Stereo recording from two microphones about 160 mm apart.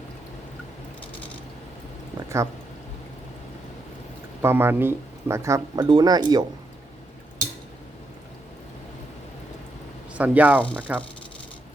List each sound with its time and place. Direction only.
2.1 s speech: 20° right (ahead or behind)
4.4 s speech: 15° right (ahead or behind)
10.2 s speech: 10° right (ahead or behind)